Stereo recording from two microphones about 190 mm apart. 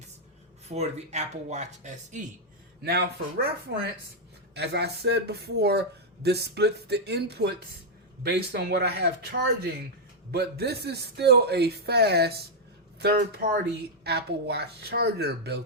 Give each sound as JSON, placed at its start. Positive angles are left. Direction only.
{"t": 0.7, "sound": "speech", "side_deg": -35}
{"t": 2.8, "sound": "speech", "side_deg": -55}
{"t": 4.5, "sound": "speech", "side_deg": -60}
{"t": 14.0, "sound": "speech", "side_deg": -60}